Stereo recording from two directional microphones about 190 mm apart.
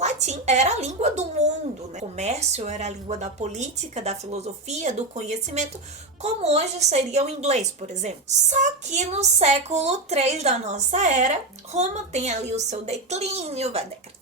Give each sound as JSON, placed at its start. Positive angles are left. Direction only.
{"t": 0.0, "sound": "a woman's voice", "side_deg": -35}